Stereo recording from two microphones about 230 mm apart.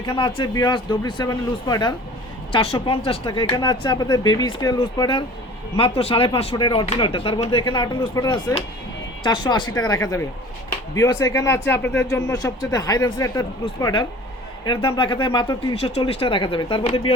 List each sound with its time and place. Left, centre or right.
0.0 s speech: centre